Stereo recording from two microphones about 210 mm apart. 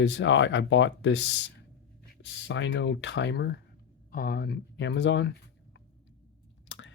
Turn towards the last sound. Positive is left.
turn(degrees=60)  # may be behind; listen again after turning